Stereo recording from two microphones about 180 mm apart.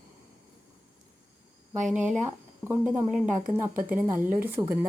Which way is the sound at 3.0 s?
45° right (ahead or behind).